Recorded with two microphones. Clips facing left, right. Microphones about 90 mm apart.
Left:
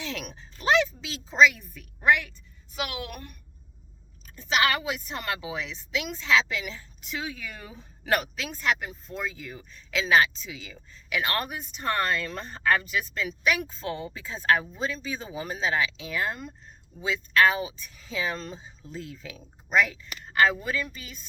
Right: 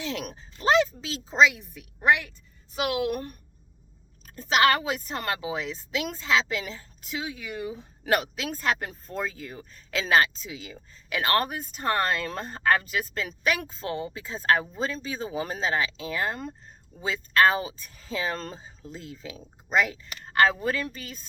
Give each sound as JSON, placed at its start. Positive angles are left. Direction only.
{"t": 0.0, "sound": "speech", "side_deg": -25}
{"t": 4.4, "sound": "speech", "side_deg": -35}
{"t": 6.2, "sound": "a woman's voice", "side_deg": -30}
{"t": 8.8, "sound": "speech", "side_deg": -45}
{"t": 13.7, "sound": "speech", "side_deg": -25}